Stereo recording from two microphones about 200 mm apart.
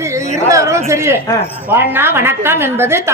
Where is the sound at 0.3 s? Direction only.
15° right (ahead or behind).